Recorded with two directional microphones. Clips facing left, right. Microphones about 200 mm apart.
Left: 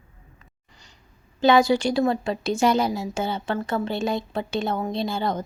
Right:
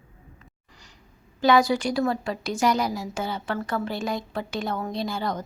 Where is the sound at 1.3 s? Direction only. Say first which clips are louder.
Left 2 dB; 25° left (ahead or behind).